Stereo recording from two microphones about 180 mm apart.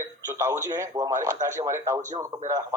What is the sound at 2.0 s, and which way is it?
Speech, 40° right (ahead or behind).